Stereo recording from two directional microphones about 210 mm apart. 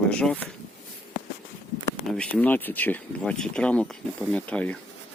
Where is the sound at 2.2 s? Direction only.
5° left (ahead or behind).